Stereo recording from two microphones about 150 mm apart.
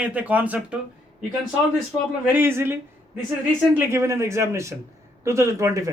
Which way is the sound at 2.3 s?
15° right (ahead or behind).